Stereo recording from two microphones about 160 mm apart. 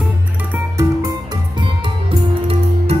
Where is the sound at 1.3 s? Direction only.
30° right (ahead or behind).